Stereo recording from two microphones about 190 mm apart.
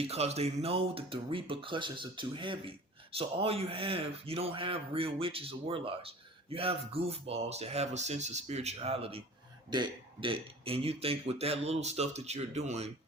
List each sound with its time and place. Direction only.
0.0 s speech: 35° right (ahead or behind)